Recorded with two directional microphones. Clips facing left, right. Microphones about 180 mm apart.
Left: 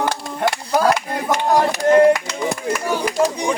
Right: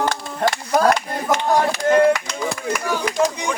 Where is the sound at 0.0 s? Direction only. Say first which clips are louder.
Even; 5° left (ahead or behind).